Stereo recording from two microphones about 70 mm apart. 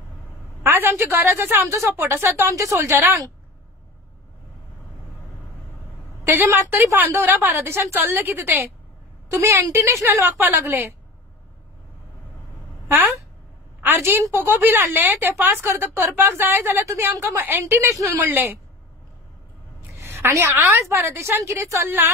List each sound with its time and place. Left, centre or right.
0.7 s a woman's voice: right
6.2 s a woman's voice: right
12.8 s a woman's voice: right
16.8 s a woman's voice: right
20.0 s a woman's voice: right